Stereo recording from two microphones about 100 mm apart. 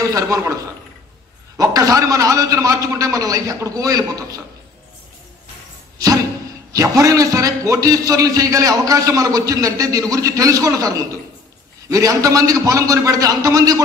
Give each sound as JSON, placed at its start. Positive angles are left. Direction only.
{"t": 0.0, "sound": "a man's voice", "side_deg": -30}
{"t": 1.6, "sound": "a man's voice", "side_deg": -35}
{"t": 6.7, "sound": "a man's voice", "side_deg": -35}